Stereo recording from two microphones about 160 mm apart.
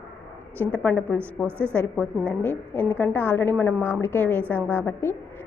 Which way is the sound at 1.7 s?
10° left (ahead or behind).